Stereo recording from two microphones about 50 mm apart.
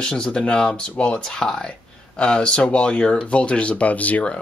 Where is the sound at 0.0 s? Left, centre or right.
Centre.